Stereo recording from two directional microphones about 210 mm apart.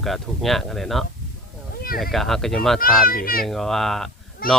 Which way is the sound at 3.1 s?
45° left (ahead or behind).